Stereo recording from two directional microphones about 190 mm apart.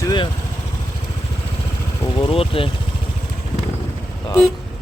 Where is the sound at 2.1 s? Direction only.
30° left (ahead or behind).